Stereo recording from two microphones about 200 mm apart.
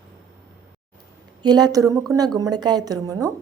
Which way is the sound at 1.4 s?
20° right (ahead or behind).